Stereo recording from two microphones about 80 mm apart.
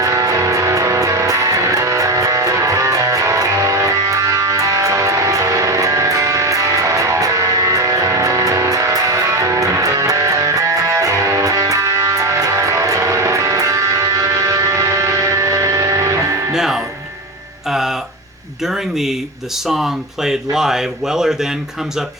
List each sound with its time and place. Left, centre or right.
0.0 s music: right
16.5 s music: centre
18.6 s a sound: centre
19.6 s speech: centre